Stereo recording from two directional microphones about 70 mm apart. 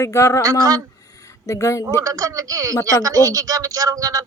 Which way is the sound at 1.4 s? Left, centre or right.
Left.